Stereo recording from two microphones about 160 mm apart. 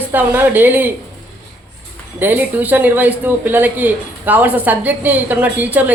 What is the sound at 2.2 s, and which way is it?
Speech, 10° right (ahead or behind).